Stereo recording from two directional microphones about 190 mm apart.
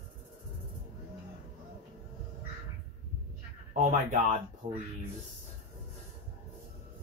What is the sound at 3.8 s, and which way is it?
Speech, 40° right (ahead or behind).